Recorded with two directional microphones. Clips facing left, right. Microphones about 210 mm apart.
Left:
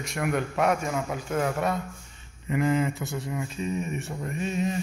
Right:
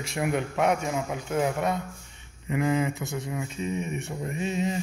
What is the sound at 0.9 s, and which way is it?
Speech, 15° right (ahead or behind).